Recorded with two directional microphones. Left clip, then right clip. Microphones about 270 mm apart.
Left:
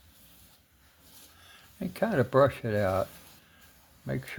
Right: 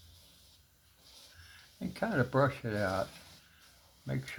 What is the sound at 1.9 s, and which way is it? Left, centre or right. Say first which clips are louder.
Speech: left 6 dB; left.